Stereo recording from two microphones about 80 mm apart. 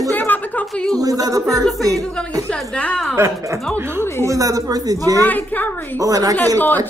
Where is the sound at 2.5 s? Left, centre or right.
Centre.